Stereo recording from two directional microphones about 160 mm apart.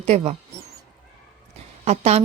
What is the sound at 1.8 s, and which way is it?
Speech, 45° right (ahead or behind).